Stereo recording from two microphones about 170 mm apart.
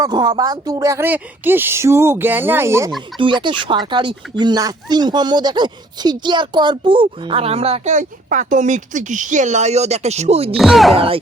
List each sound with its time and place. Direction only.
0.0 s speech: 25° right (ahead or behind)
3.2 s speech: 30° right (ahead or behind)
10.6 s speech: centre (ahead or behind)
10.9 s music: 30° right (ahead or behind)